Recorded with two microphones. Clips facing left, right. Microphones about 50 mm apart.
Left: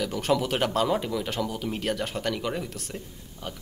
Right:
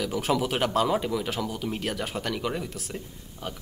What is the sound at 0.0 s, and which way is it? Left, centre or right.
Speech, centre.